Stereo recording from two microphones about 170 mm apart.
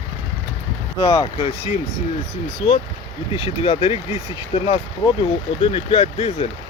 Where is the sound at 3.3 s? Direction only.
30° left (ahead or behind).